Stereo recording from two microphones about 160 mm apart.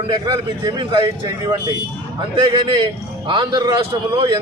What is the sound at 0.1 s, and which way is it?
Speech, 30° right (ahead or behind).